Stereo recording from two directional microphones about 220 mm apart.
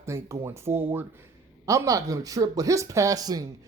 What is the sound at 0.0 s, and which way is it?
Speech, 10° right (ahead or behind).